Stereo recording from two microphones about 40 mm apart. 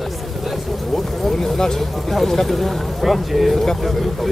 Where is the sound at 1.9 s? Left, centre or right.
Centre.